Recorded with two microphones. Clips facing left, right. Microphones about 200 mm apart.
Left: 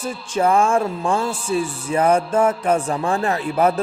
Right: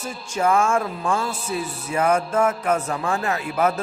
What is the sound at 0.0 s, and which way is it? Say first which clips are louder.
Speech: left 3 dB; 35° left (ahead or behind).